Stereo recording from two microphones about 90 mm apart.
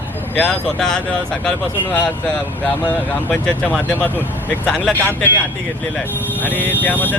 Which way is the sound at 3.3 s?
10° left (ahead or behind).